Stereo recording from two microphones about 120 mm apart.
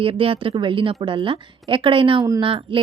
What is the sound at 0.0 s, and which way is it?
Speech, 50° right (ahead or behind).